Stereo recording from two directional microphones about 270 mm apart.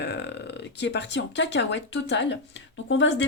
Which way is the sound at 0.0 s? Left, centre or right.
Left.